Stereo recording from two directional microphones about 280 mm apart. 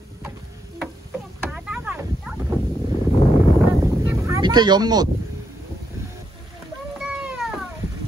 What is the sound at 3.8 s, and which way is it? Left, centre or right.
Wind noise, centre.